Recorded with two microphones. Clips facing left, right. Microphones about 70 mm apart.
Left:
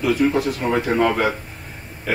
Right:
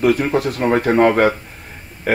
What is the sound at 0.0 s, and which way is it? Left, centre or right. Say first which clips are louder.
Speech: right 2 dB; right.